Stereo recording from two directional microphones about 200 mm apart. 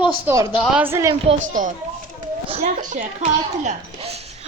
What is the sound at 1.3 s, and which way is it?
A woman's voice, 40° right (ahead or behind).